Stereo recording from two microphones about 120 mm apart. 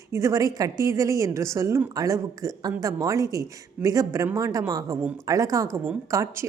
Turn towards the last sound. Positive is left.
turn(degrees=-25)  # may be behind; listen again after turning